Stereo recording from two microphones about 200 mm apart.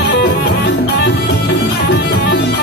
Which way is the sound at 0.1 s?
60° left (ahead or behind).